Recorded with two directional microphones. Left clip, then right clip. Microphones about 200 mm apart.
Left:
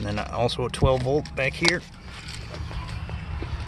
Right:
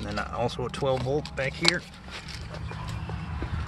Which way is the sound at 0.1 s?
35° left (ahead or behind).